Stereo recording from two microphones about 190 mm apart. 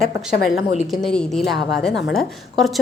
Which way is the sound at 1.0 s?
Centre (ahead or behind).